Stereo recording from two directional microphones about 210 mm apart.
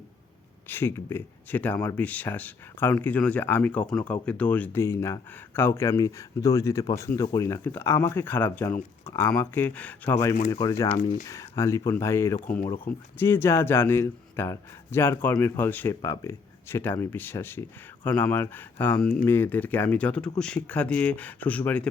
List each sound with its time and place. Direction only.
0.7 s speech: 10° left (ahead or behind)
12.6 s speech: 25° left (ahead or behind)
13.1 s speech: 10° left (ahead or behind)